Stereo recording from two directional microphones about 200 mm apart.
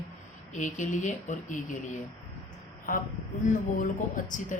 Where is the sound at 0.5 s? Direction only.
40° left (ahead or behind).